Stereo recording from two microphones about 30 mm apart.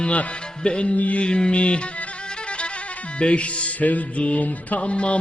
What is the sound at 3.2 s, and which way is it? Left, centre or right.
Music, left.